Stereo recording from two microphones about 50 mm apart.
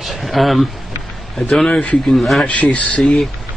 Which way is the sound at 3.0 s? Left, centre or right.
Centre.